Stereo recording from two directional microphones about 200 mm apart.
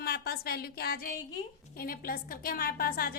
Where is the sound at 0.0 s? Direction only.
50° left (ahead or behind).